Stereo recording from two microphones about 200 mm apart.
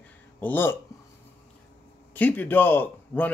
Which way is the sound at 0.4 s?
10° left (ahead or behind).